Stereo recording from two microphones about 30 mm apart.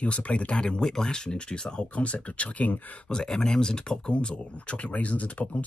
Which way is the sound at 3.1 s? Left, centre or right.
Left.